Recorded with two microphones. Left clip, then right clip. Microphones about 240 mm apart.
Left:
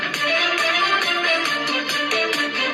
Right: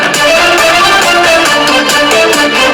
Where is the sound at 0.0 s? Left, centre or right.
Right.